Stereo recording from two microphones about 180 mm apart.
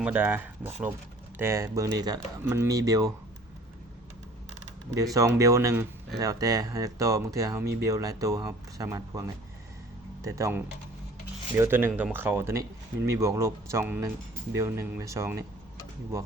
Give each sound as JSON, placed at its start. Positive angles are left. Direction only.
{"t": 0.0, "sound": "speech", "side_deg": -10}
{"t": 5.1, "sound": "speech", "side_deg": -15}
{"t": 7.6, "sound": "speech", "side_deg": -60}
{"t": 7.9, "sound": "speech", "side_deg": -20}